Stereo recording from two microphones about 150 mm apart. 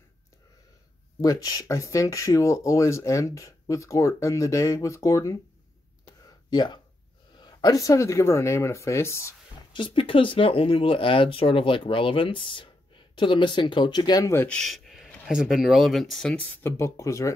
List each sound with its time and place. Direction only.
1.2 s speech: 25° left (ahead or behind)
6.5 s speech: 30° left (ahead or behind)
9.7 s speech: 35° left (ahead or behind); by 14.6 s 15° left (ahead or behind)
14.6 s speech: centre (ahead or behind); by 17.3 s 20° left (ahead or behind)